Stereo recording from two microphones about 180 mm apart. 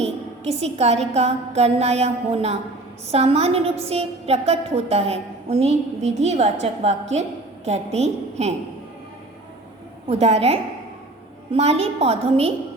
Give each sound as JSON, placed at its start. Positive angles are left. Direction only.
{"t": 0.0, "sound": "a woman's voice", "side_deg": -35}
{"t": 10.1, "sound": "a woman's voice", "side_deg": -35}